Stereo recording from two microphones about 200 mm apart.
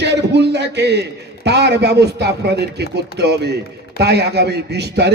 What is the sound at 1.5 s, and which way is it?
A man's voice, 55° right (ahead or behind).